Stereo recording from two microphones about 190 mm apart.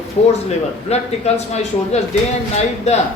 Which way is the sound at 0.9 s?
35° left (ahead or behind).